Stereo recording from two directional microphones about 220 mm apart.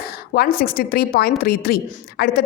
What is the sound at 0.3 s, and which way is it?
A woman's voice, 40° left (ahead or behind).